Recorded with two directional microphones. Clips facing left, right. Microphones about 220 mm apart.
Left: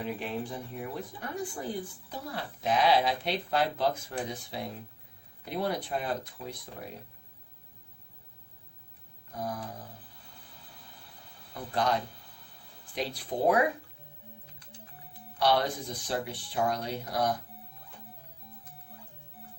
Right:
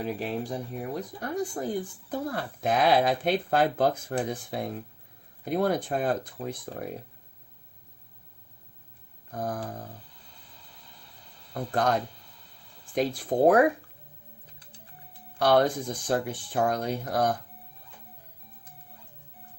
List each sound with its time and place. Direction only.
0.0 s speech: 40° right (ahead or behind)
9.3 s speech: 50° right (ahead or behind)
11.5 s speech: 50° right (ahead or behind)
13.3 s speech: 50° right (ahead or behind)
15.4 s speech: 50° right (ahead or behind)